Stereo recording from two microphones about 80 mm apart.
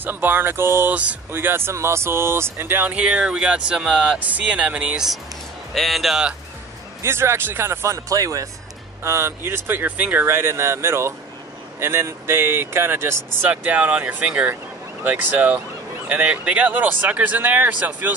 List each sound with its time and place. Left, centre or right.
0.0 s speech: right; by 6.2 s centre
7.0 s speech: right
9.0 s speech: right
10.2 s speech: right